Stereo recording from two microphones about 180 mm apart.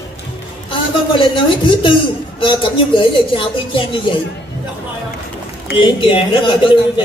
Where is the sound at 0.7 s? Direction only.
25° left (ahead or behind).